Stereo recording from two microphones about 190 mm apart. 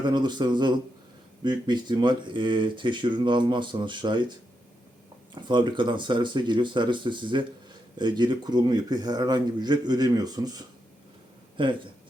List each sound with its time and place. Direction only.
0.0 s speech: 25° right (ahead or behind)
5.3 s speech: 25° right (ahead or behind)
11.6 s speech: 25° right (ahead or behind)